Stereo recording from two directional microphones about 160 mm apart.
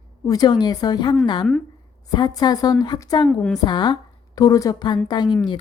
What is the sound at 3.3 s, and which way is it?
Speech, 5° left (ahead or behind).